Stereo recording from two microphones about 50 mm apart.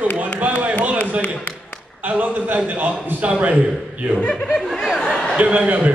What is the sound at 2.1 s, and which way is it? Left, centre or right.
A man's voice, right.